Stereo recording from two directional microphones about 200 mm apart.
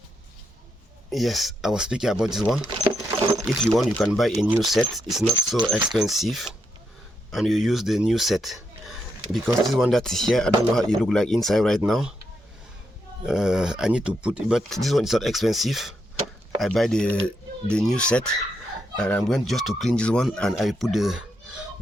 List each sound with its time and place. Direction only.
1.1 s speech: centre (ahead or behind)
13.2 s speech: 5° right (ahead or behind)